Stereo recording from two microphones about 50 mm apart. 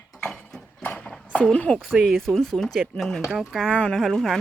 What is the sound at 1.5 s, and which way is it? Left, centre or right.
Speech, left.